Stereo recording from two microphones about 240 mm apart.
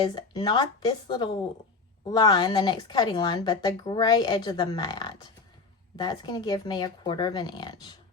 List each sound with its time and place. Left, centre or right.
0.0 s a woman's voice: centre